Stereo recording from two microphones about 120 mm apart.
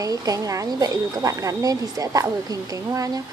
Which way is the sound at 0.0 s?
30° right (ahead or behind).